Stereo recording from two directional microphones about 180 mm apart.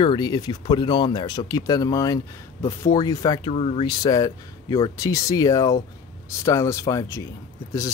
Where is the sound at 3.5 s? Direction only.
35° left (ahead or behind).